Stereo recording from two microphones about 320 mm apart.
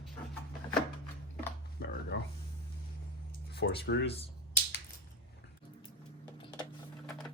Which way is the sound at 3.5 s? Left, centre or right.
Left.